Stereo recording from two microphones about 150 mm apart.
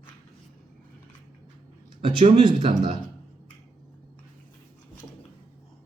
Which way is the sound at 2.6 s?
40° right (ahead or behind).